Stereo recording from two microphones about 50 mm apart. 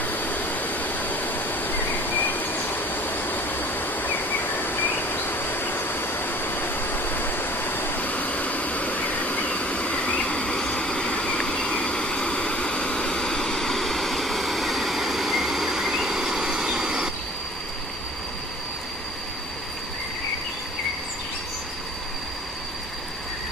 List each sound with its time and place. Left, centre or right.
0.0 s vehicle: left; by 17.1 s centre